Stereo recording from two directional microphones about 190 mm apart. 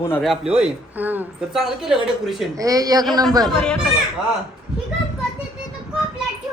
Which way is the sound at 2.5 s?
20° right (ahead or behind).